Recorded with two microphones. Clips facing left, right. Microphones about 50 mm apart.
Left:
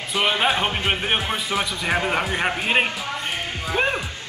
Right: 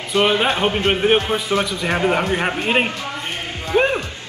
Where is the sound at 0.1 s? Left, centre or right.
Centre.